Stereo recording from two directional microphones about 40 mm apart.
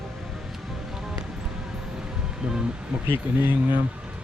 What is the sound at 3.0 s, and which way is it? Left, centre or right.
Speech, right.